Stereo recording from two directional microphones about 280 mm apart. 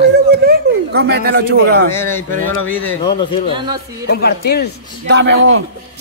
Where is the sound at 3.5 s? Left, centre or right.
Centre.